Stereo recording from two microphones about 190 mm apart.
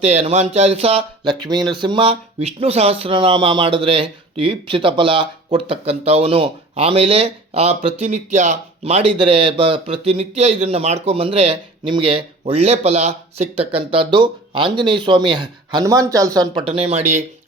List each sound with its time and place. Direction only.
0.1 s speech: 35° right (ahead or behind)